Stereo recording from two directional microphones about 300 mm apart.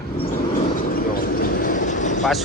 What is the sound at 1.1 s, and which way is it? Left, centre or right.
Vehicle, left.